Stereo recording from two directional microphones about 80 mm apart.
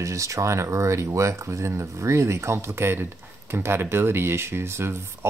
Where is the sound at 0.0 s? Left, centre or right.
Right.